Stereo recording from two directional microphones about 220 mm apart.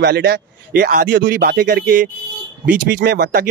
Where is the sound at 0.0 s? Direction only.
50° right (ahead or behind).